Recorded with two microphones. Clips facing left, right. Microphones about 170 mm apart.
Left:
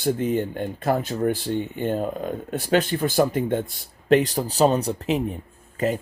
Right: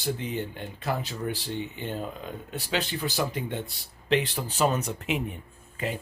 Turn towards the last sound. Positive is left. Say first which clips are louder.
# left 9 dB
turn(degrees=45)  # may be behind; listen again after turning